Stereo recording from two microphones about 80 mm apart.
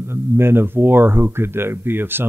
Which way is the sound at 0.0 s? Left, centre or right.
Right.